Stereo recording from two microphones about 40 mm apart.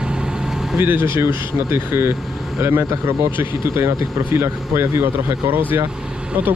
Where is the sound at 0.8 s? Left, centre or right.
Right.